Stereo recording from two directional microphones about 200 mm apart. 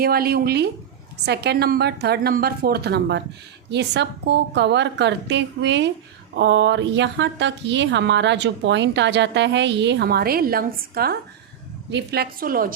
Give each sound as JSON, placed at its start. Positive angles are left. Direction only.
{"t": 0.0, "sound": "a woman's voice", "side_deg": -50}